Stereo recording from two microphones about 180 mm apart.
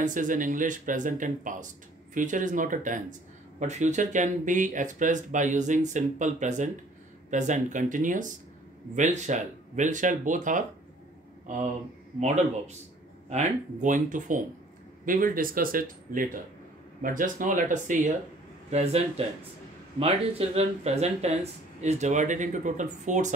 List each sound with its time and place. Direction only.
0.0 s speech: 45° right (ahead or behind)
18.7 s speech: 35° right (ahead or behind)